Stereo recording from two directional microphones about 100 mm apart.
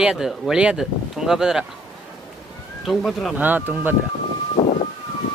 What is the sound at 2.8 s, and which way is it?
Speech, centre (ahead or behind).